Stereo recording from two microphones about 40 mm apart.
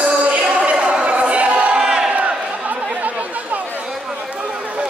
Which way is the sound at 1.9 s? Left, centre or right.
Centre.